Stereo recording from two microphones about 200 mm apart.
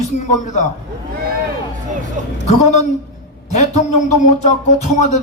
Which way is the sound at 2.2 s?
40° right (ahead or behind).